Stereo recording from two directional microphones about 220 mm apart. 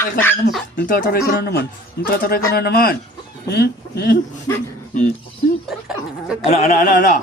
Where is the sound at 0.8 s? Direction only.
40° left (ahead or behind).